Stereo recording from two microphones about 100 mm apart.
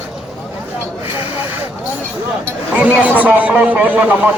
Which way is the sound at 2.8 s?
15° right (ahead or behind).